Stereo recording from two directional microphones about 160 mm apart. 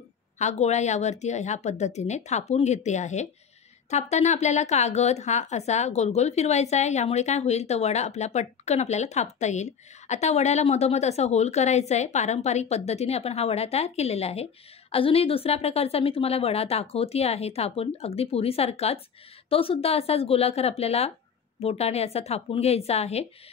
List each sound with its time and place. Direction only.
0.4 s a woman's voice: 45° left (ahead or behind)